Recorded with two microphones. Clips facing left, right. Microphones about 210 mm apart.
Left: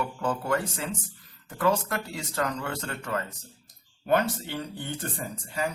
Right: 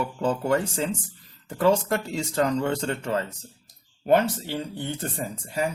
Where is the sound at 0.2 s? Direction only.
30° right (ahead or behind).